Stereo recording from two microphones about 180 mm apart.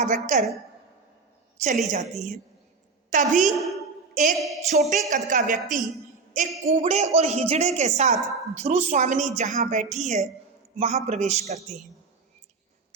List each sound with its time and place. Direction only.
0.0 s a woman's voice: 45° right (ahead or behind)
1.9 s a man's voice: 40° right (ahead or behind)
4.1 s a sound: 45° right (ahead or behind)
4.7 s a man's voice: 40° right (ahead or behind)